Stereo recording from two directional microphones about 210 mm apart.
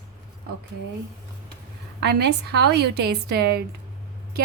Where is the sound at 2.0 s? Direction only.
50° right (ahead or behind).